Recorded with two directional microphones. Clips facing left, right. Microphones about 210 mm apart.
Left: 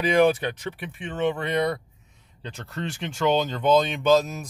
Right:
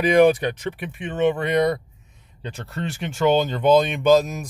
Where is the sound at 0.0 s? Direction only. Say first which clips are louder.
Right 4 dB; 15° right (ahead or behind).